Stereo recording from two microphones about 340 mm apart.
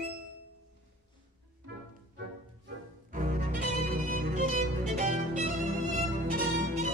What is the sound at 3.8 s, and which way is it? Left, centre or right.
Music, right.